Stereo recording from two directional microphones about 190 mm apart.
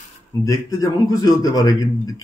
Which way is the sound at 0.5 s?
20° left (ahead or behind).